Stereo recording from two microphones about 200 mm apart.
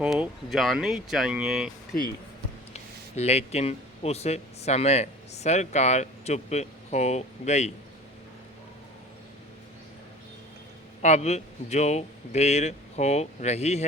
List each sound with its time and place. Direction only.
0.0 s speech: 5° right (ahead or behind)
3.2 s speech: 30° left (ahead or behind)
11.0 s speech: 35° left (ahead or behind)